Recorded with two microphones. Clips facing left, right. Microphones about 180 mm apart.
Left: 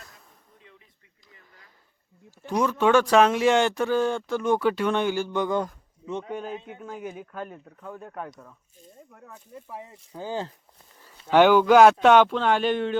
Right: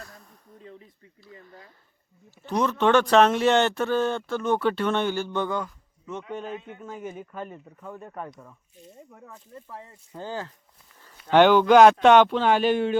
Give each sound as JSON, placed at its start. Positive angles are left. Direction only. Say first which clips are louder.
{"t": 0.6, "sound": "a sound", "louder": "right 11 dB", "side_deg": -40}
{"t": 2.4, "sound": "speech", "louder": "even", "side_deg": 10}
{"t": 6.3, "sound": "speech", "louder": "left 1 dB", "side_deg": 5}
{"t": 9.6, "sound": "speech", "louder": "left 2 dB", "side_deg": 15}